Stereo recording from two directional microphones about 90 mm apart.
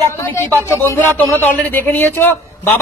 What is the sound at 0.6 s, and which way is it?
A man's voice, 25° left (ahead or behind).